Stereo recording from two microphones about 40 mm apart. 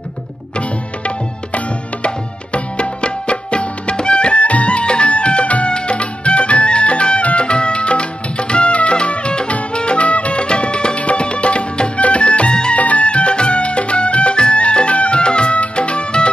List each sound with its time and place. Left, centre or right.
0.6 s music: left
12.7 s music: left